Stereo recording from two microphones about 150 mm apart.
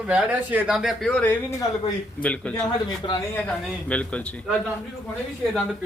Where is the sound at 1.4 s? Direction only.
20° left (ahead or behind).